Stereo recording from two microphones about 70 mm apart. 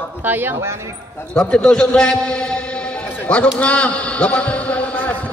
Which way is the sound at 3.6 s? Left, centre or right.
Centre.